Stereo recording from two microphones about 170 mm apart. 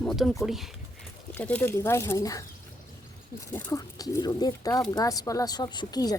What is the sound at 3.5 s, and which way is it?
Speech, 15° left (ahead or behind).